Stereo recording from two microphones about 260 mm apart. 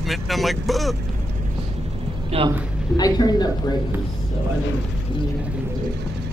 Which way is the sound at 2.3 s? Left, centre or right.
Right.